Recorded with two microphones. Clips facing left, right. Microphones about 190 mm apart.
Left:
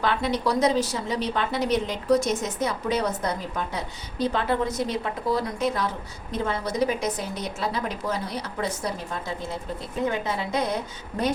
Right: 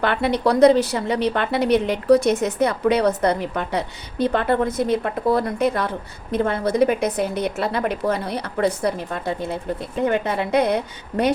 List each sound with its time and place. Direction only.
0.0 s a woman's voice: 60° right (ahead or behind)